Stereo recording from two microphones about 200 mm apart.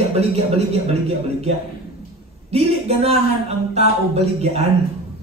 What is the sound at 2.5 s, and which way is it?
Speech, 30° right (ahead or behind).